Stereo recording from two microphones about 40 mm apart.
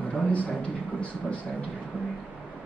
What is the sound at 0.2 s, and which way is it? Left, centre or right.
Speech, left.